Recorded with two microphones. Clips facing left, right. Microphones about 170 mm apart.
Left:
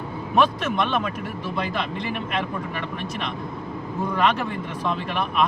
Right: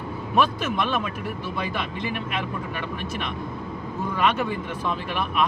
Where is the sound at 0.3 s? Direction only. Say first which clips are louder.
Left 2 dB; 5° right (ahead or behind).